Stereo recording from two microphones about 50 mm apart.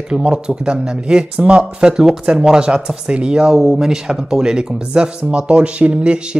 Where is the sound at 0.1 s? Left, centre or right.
Centre.